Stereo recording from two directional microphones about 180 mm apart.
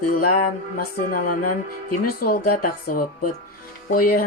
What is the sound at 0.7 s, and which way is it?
Speech, 50° left (ahead or behind).